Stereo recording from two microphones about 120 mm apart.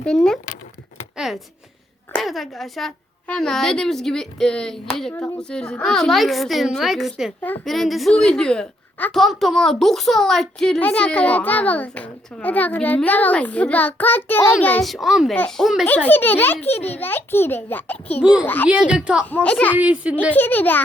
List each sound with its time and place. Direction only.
0.0 s a woman's voice: 5° left (ahead or behind)
14.8 s a woman's voice: centre (ahead or behind)
15.9 s a woman's voice: 15° left (ahead or behind)
18.2 s a woman's voice: 5° right (ahead or behind)
18.4 s a woman's voice: 15° left (ahead or behind)
18.7 s a woman's voice: 10° right (ahead or behind)
19.3 s a woman's voice: 10° left (ahead or behind)
19.7 s a woman's voice: 10° right (ahead or behind)
20.3 s a woman's voice: 15° left (ahead or behind)